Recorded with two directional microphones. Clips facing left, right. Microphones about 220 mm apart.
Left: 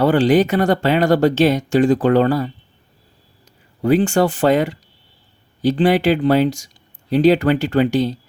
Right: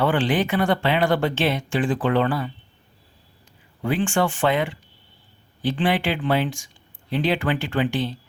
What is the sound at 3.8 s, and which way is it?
Speech, 40° left (ahead or behind).